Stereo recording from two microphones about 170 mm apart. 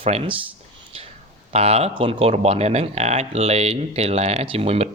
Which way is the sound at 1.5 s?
40° right (ahead or behind).